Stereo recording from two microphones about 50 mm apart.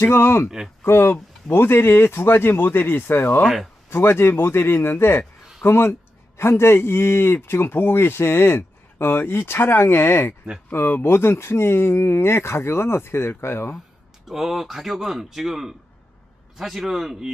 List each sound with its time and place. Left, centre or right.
0.0 s speech: left
14.2 s speech: centre